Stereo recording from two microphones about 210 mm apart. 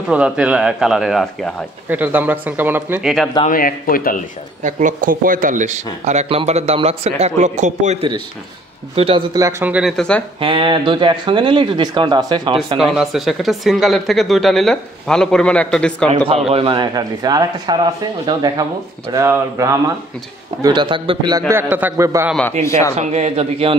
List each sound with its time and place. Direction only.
0.1 s a man's voice: 5° right (ahead or behind)
3.4 s speech: 40° left (ahead or behind)
4.6 s a man's voice: 35° right (ahead or behind); by 10.2 s 5° left (ahead or behind)
10.4 s speech: 25° right (ahead or behind)
12.7 s speech: centre (ahead or behind)
16.3 s a man's voice: 25° right (ahead or behind)
22.6 s a man's voice: 15° left (ahead or behind)
22.9 s speech: 30° right (ahead or behind)